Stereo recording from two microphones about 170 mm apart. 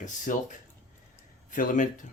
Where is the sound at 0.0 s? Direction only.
45° left (ahead or behind).